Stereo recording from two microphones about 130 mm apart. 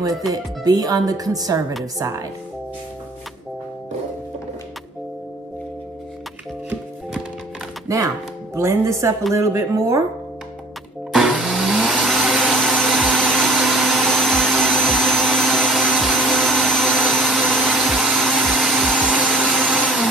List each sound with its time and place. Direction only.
0.3 s speech: 30° right (ahead or behind)
7.9 s speech: 25° right (ahead or behind)
11.1 s vacuum cleaner: centre (ahead or behind)